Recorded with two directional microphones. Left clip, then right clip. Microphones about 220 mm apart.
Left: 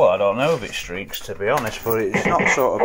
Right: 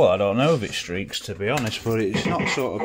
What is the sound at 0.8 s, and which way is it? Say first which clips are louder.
Speech: even; 60° right (ahead or behind).